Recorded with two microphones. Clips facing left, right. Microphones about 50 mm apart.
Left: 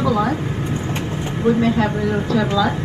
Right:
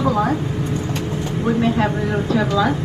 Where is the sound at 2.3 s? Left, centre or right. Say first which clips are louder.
Even; right.